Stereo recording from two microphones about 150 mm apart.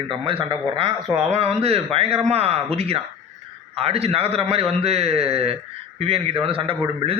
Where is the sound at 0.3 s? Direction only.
35° right (ahead or behind).